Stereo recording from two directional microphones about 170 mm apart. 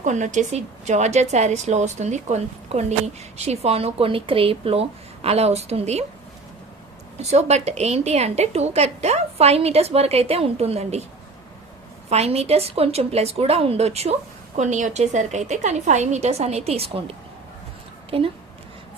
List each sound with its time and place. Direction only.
0.0 s a woman's voice: 45° right (ahead or behind)
7.2 s a woman's voice: 40° right (ahead or behind)
12.0 s a woman's voice: 40° right (ahead or behind)